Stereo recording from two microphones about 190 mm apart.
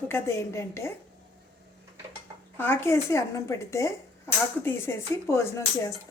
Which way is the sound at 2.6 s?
15° left (ahead or behind).